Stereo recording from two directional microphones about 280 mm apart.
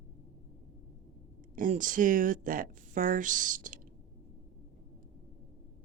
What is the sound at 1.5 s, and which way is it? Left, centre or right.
Speech, right.